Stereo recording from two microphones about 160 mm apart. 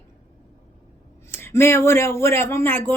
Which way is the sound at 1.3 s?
15° left (ahead or behind).